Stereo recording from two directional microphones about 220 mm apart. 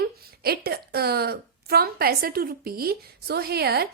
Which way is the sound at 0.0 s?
45° right (ahead or behind).